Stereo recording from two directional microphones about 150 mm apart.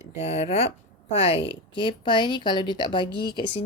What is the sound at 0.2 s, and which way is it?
Speech, 40° left (ahead or behind).